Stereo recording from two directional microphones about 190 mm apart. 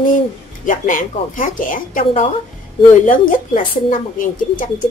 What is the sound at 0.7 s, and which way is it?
A woman's voice, 45° left (ahead or behind).